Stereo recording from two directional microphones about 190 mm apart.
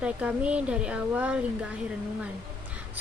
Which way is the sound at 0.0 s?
5° right (ahead or behind).